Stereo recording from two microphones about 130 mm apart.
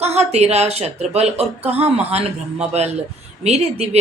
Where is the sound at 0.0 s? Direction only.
55° right (ahead or behind).